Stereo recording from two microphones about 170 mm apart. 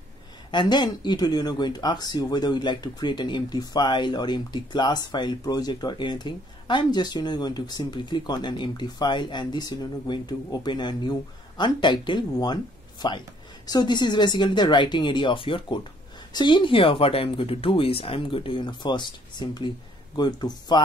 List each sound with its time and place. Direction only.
0.5 s speech: 25° left (ahead or behind)